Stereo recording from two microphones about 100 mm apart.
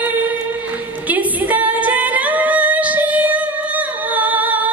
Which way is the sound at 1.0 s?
15° right (ahead or behind).